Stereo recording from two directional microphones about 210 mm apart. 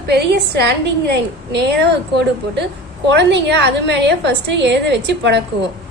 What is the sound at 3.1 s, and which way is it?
A woman's voice, 55° right (ahead or behind).